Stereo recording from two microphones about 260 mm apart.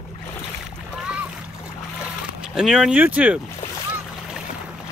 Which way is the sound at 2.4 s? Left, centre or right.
Centre.